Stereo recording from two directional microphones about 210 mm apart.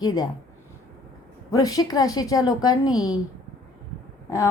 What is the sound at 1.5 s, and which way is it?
A woman's voice, 15° left (ahead or behind).